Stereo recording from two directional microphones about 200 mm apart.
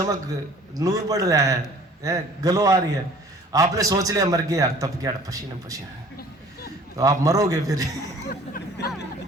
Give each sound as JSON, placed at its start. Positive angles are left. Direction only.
{"t": 0.8, "sound": "a man's voice", "side_deg": -20}
{"t": 6.9, "sound": "a man's voice", "side_deg": -15}
{"t": 8.3, "sound": "music", "side_deg": 45}